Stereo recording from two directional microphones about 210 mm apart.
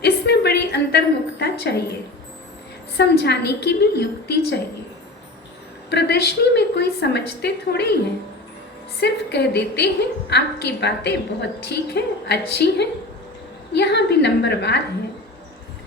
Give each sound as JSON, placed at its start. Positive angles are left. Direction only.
{"t": 0.0, "sound": "a woman's voice", "side_deg": 50}
{"t": 3.0, "sound": "a woman's voice", "side_deg": 50}
{"t": 5.9, "sound": "a woman's voice", "side_deg": 55}
{"t": 9.0, "sound": "a woman's voice", "side_deg": 50}